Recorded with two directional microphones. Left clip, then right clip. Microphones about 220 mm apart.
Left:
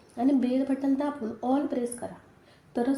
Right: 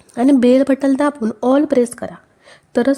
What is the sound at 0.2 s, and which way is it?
Speech, 55° right (ahead or behind).